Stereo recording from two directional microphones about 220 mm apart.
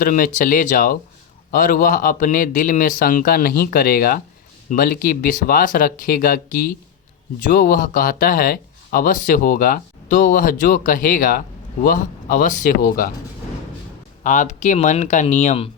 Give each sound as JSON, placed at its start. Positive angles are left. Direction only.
{"t": 0.0, "sound": "speech", "side_deg": 35}
{"t": 14.3, "sound": "speech", "side_deg": 35}